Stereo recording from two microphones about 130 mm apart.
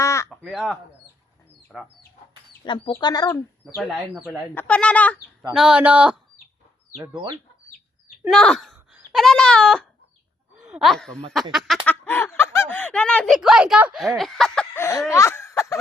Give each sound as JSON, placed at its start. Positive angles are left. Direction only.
{"t": 0.0, "sound": "crow", "side_deg": 25}
{"t": 0.3, "sound": "speech", "side_deg": 0}
{"t": 2.6, "sound": "speech", "side_deg": 40}
{"t": 3.8, "sound": "speech", "side_deg": 0}
{"t": 4.5, "sound": "speech", "side_deg": 10}
{"t": 5.5, "sound": "speech", "side_deg": -5}
{"t": 8.3, "sound": "a child's voice", "side_deg": 5}
{"t": 11.9, "sound": "speech", "side_deg": 15}
{"t": 13.3, "sound": "speech", "side_deg": -5}
{"t": 14.2, "sound": "a sound", "side_deg": 5}
{"t": 14.8, "sound": "speech", "side_deg": 20}